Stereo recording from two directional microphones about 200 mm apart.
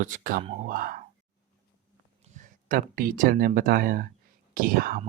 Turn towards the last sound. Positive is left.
turn(degrees=-45)  # may be behind; listen again after turning